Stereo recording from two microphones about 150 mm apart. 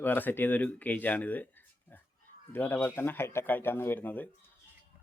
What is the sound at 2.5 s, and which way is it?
Speech, 15° left (ahead or behind).